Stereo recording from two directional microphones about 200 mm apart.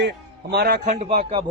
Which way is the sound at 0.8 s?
30° right (ahead or behind).